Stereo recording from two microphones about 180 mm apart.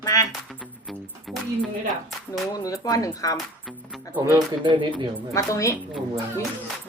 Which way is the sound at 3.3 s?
Centre (ahead or behind).